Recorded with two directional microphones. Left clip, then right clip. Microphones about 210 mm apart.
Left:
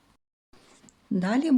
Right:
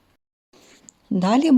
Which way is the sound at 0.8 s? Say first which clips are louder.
Right 7 dB; 20° right (ahead or behind).